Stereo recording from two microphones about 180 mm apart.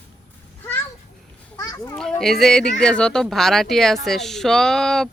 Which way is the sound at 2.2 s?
Centre (ahead or behind).